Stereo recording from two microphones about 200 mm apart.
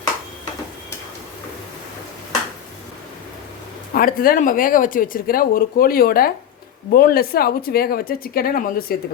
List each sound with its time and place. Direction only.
3.9 s speech: 45° left (ahead or behind)